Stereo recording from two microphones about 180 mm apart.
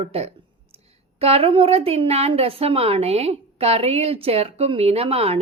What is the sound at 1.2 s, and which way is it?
Speech, 35° right (ahead or behind).